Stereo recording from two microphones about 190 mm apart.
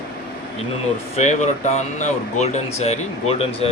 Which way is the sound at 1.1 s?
35° left (ahead or behind).